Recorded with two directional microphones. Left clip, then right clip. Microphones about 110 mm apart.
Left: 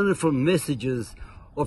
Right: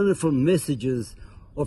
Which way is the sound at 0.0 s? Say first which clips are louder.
Right 1 dB; 15° left (ahead or behind).